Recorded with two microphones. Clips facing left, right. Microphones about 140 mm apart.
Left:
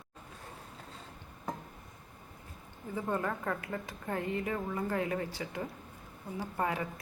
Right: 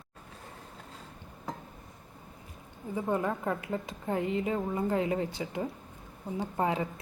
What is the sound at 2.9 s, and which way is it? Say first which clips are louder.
Speech: right 4 dB; 15° right (ahead or behind).